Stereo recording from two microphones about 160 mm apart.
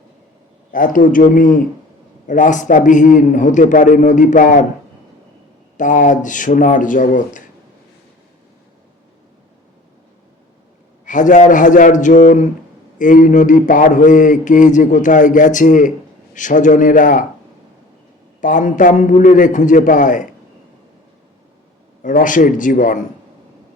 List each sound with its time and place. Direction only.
0.7 s speech: 55° left (ahead or behind)
2.2 s mantra: 55° left (ahead or behind)
5.7 s mantra: 55° left (ahead or behind)
11.0 s mantra: 50° left (ahead or behind)
16.3 s speech: 50° left (ahead or behind)
18.3 s mantra: 55° left (ahead or behind)
22.0 s speech: 55° left (ahead or behind)